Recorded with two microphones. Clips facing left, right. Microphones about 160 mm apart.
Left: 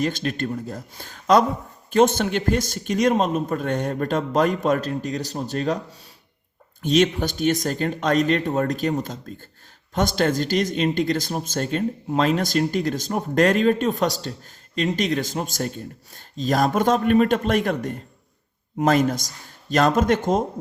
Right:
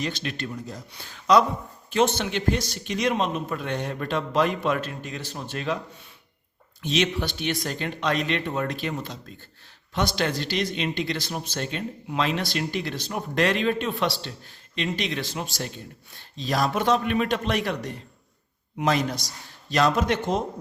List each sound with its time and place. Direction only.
0.0 s speech: 45° left (ahead or behind)